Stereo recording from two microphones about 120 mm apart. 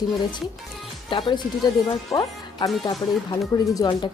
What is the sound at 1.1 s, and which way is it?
A woman's voice, 45° left (ahead or behind).